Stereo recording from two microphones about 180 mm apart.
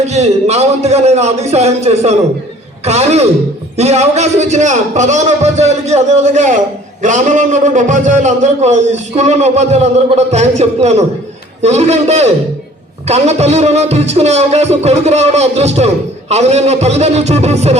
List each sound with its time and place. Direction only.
0.0 s a man's voice: 35° right (ahead or behind)